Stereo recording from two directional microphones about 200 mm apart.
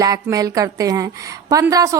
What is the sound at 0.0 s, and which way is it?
A woman's voice, 15° right (ahead or behind).